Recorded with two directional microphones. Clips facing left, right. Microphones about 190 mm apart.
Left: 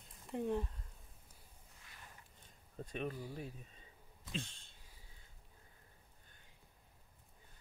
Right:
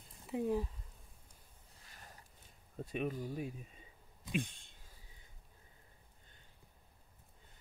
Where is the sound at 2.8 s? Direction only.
5° right (ahead or behind).